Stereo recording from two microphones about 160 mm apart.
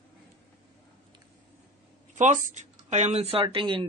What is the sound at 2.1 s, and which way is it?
Speech, 50° right (ahead or behind).